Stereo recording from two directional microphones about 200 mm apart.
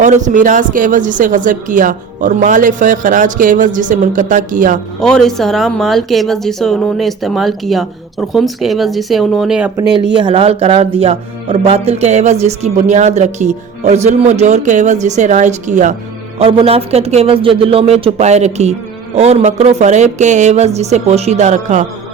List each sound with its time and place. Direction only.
0.0 s speech: 35° right (ahead or behind)
4.9 s speech: 5° left (ahead or behind)
9.9 s speech: 20° right (ahead or behind)